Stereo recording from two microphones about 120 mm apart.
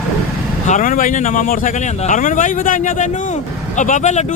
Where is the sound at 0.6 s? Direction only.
90° left.